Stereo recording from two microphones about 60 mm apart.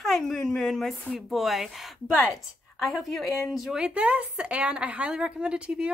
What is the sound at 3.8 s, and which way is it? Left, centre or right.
A woman's voice, right.